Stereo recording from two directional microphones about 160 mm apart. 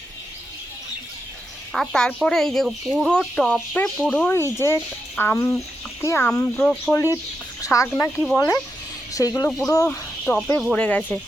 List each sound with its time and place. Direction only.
1.7 s speech: centre (ahead or behind)
4.3 s speech: 15° left (ahead or behind)
7.6 s speech: 20° left (ahead or behind)
10.8 s speech: 10° left (ahead or behind)